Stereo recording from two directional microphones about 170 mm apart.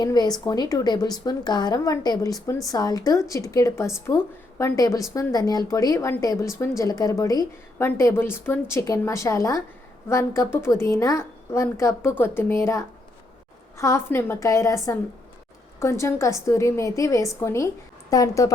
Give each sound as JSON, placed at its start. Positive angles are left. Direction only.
{"t": 0.0, "sound": "a woman's voice", "side_deg": 25}
{"t": 6.3, "sound": "speech", "side_deg": 0}
{"t": 6.6, "sound": "a woman's voice", "side_deg": 20}